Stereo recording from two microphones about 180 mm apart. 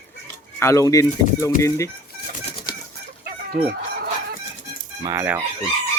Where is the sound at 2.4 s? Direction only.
30° left (ahead or behind).